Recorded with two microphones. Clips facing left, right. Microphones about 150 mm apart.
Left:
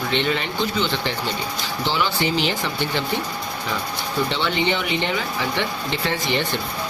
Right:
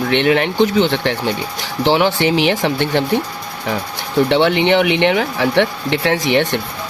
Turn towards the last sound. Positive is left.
turn(degrees=-75)  # may be behind; listen again after turning